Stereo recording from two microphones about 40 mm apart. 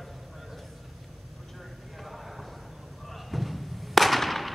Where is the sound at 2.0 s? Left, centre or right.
Centre.